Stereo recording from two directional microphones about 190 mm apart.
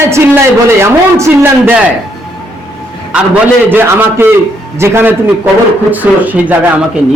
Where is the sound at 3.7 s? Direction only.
10° right (ahead or behind).